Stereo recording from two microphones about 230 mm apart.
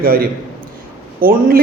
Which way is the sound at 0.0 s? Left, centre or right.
Right.